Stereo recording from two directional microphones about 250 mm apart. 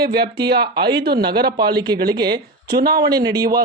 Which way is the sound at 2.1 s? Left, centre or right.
Centre.